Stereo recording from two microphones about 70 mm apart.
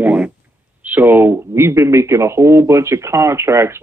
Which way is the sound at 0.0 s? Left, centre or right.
Right.